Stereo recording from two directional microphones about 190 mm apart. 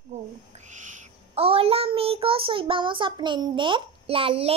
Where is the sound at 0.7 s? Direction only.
40° right (ahead or behind).